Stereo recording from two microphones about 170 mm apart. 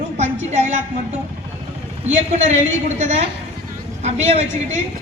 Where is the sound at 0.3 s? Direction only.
45° right (ahead or behind).